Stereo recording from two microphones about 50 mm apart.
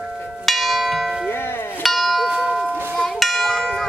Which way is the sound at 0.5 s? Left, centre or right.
Centre.